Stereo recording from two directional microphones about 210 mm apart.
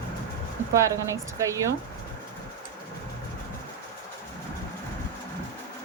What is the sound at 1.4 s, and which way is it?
Speech, 15° right (ahead or behind).